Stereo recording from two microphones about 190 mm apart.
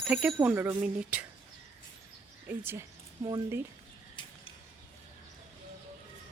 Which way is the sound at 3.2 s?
25° right (ahead or behind).